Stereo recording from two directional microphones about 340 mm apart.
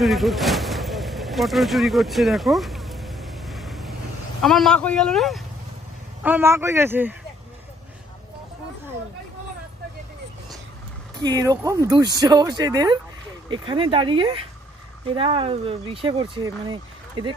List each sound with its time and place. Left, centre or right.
0.0 s vehicle: centre
4.4 s speech: centre
11.1 s speech: centre